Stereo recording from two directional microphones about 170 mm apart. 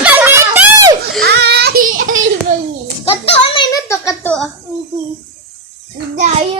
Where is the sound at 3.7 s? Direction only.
15° left (ahead or behind).